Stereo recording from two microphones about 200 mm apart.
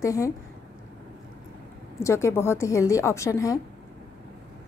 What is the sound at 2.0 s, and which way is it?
A woman's voice, 15° left (ahead or behind).